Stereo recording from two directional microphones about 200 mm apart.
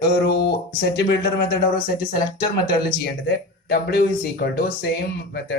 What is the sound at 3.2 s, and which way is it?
Speech, 55° left (ahead or behind).